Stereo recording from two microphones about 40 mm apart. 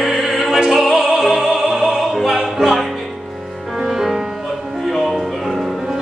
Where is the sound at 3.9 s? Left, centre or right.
Centre.